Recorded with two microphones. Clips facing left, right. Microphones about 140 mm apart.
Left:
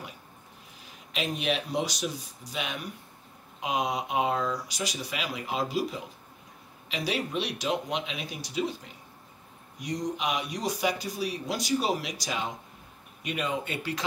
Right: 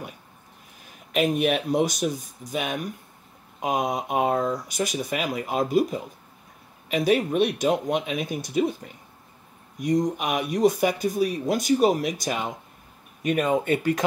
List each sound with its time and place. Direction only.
1.1 s speech: 55° right (ahead or behind)